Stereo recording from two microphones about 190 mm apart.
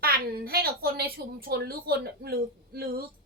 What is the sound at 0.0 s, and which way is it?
A woman's voice, 55° right (ahead or behind).